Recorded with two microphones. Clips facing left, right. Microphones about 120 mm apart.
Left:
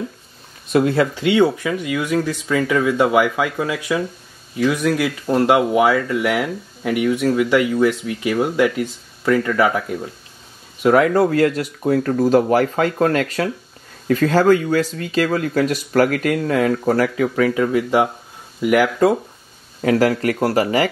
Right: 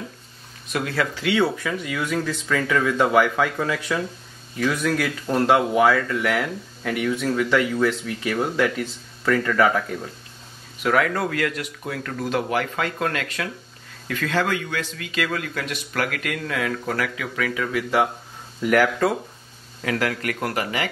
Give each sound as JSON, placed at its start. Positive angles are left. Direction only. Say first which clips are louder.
{"t": 0.7, "sound": "speech", "louder": "left 9 dB", "side_deg": 25}
{"t": 1.3, "sound": "speech", "louder": "left 5 dB", "side_deg": 15}
{"t": 10.8, "sound": "speech", "louder": "left 7 dB", "side_deg": 30}
{"t": 18.6, "sound": "speech", "louder": "left 4 dB", "side_deg": 10}
{"t": 19.8, "sound": "speech", "louder": "left 9 dB", "side_deg": 35}